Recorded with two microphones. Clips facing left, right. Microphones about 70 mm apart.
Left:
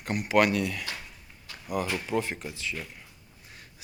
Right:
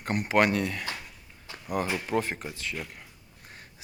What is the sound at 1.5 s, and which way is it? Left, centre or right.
Walk, right.